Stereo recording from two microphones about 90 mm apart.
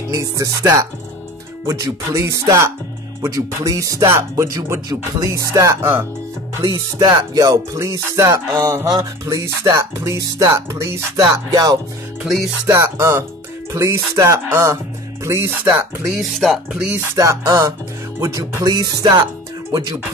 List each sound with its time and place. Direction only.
0.1 s speech: 35° right (ahead or behind)
6.6 s music: 45° right (ahead or behind)
8.8 s speech: 40° right (ahead or behind)
11.1 s music: 45° right (ahead or behind)
12.6 s speech: 35° right (ahead or behind)
16.2 s speech: centre (ahead or behind)
16.9 s speech: 30° right (ahead or behind)